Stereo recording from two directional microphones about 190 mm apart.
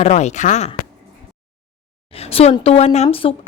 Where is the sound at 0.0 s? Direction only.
35° left (ahead or behind).